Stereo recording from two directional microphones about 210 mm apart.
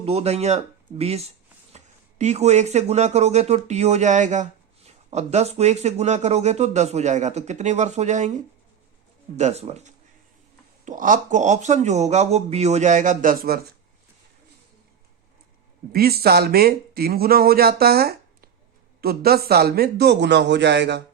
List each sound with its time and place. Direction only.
0.0 s speech: 30° right (ahead or behind)
15.9 s speech: 45° right (ahead or behind)